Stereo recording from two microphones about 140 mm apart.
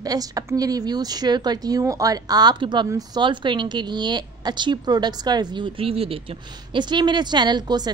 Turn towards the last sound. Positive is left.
turn(degrees=-30)  # may be behind; listen again after turning